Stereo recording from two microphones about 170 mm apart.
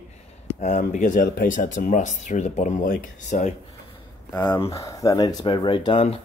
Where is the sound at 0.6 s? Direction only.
45° left (ahead or behind).